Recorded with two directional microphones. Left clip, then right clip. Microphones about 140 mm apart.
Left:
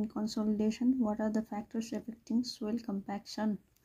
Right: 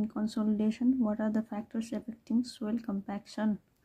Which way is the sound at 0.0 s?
15° right (ahead or behind).